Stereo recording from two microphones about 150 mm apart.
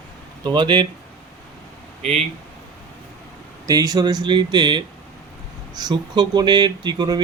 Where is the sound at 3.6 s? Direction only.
25° right (ahead or behind).